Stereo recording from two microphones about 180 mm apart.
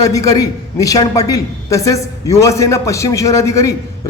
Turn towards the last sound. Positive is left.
turn(degrees=15)  # may be behind; listen again after turning